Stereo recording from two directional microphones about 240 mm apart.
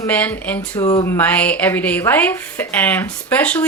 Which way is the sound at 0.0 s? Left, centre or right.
Centre.